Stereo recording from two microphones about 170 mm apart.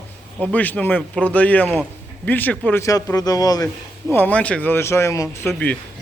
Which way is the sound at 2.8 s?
20° left (ahead or behind).